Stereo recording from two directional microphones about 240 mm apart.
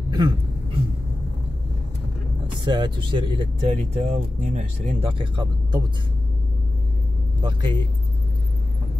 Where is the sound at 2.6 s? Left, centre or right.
Centre.